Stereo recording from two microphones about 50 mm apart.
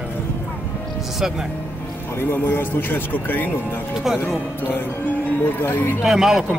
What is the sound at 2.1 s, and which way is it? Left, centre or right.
Speech, left.